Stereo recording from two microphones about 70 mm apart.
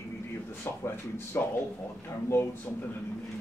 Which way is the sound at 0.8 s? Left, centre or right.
Left.